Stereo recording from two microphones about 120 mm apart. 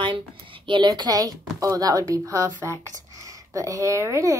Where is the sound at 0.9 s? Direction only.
30° right (ahead or behind).